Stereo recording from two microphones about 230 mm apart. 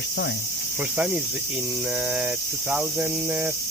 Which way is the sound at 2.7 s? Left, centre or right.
Centre.